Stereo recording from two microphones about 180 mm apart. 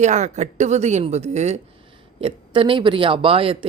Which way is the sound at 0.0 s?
40° right (ahead or behind).